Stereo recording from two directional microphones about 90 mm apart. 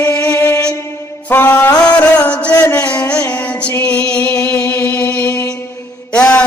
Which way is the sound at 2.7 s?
15° left (ahead or behind).